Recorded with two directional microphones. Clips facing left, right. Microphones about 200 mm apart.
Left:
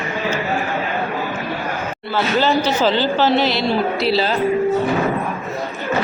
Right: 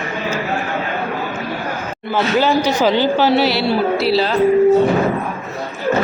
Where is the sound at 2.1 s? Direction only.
15° right (ahead or behind); by 4.4 s centre (ahead or behind).